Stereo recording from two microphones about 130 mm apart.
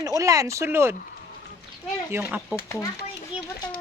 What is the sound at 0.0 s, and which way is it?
Speech, 25° right (ahead or behind).